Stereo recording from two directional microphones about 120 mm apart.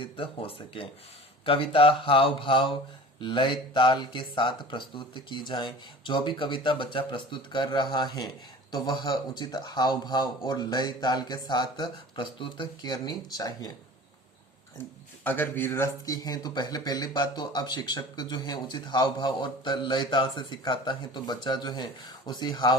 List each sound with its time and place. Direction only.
0.0 s speech: 50° left (ahead or behind); by 13.7 s 35° left (ahead or behind)
15.2 s a man's voice: 15° left (ahead or behind)
16.0 s speech: 30° left (ahead or behind)